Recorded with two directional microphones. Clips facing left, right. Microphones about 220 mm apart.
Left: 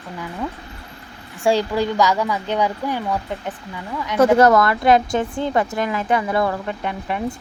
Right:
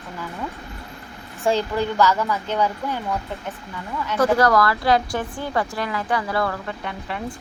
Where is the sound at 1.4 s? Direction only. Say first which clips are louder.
Left 3 dB; 15° left (ahead or behind).